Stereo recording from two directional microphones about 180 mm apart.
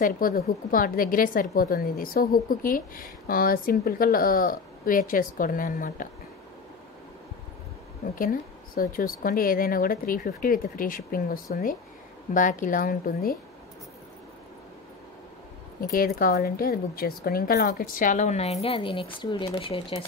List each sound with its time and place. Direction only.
0.0 s speech: 55° left (ahead or behind)
8.2 s speech: 50° left (ahead or behind)
12.4 s speech: 45° left (ahead or behind)
15.8 s speech: 50° left (ahead or behind); by 20.0 s 30° left (ahead or behind)